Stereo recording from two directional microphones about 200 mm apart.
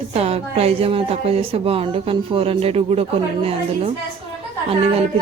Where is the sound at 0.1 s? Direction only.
30° right (ahead or behind).